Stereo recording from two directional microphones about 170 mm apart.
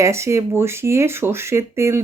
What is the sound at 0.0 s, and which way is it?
Speech, 15° right (ahead or behind).